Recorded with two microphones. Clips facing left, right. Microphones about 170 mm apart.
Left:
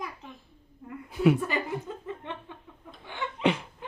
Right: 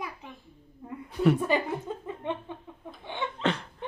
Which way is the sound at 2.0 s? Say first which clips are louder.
Right 4 dB; 15° right (ahead or behind).